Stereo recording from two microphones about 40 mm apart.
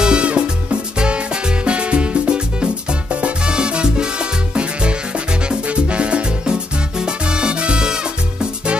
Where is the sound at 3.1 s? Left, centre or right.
Right.